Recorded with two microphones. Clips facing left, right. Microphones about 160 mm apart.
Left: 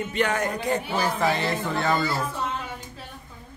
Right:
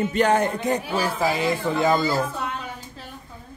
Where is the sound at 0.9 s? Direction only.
10° right (ahead or behind).